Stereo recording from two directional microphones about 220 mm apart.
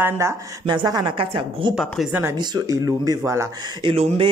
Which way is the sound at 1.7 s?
Centre (ahead or behind).